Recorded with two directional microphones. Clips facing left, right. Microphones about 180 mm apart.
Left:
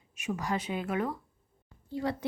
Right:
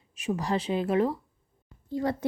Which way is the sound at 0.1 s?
30° right (ahead or behind).